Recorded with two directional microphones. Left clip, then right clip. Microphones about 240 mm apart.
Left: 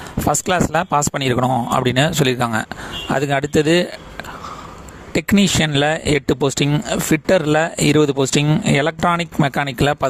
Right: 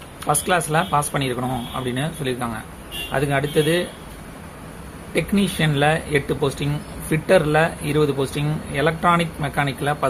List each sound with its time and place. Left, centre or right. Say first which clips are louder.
0.3 s speech: left 2 dB; left
5.1 s speech: left 5 dB; left